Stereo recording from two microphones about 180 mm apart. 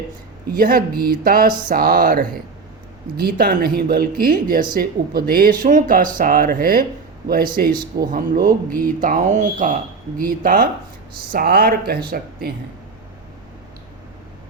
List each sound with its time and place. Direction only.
0.5 s speech: 50° right (ahead or behind)